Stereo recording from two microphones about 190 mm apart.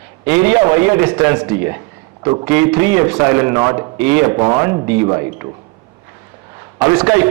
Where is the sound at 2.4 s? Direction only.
10° right (ahead or behind).